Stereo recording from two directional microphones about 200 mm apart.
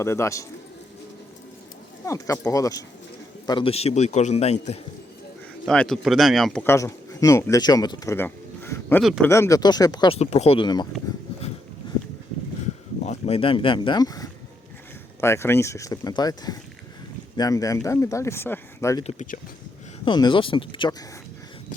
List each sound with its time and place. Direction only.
0.0 s speech: 15° left (ahead or behind)
2.0 s a man's voice: 15° left (ahead or behind); by 4.8 s 35° left (ahead or behind)
5.6 s speech: 5° left (ahead or behind)
9.0 s speech: centre (ahead or behind)
9.3 s speech: 15° left (ahead or behind)
13.1 s speech: 30° left (ahead or behind); by 19.0 s 15° left (ahead or behind)
19.0 s a man's voice: 40° left (ahead or behind)
20.1 s speech: 20° left (ahead or behind)